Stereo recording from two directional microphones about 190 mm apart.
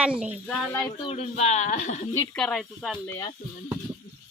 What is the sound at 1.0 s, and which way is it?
Speech, 35° left (ahead or behind).